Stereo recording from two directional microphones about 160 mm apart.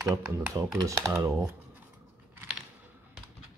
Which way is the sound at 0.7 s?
20° right (ahead or behind).